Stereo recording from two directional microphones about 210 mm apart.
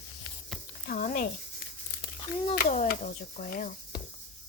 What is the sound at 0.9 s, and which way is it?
Speech, 40° left (ahead or behind).